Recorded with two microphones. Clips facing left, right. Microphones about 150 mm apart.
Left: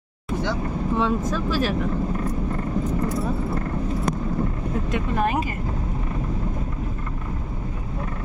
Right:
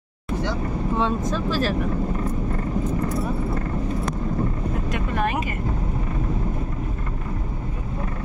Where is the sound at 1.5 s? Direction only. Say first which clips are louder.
Even; 15° left (ahead or behind).